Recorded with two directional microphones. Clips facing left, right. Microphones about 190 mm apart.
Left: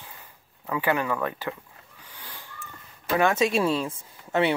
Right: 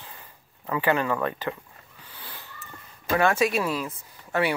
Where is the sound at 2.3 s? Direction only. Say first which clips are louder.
Even; 10° left (ahead or behind).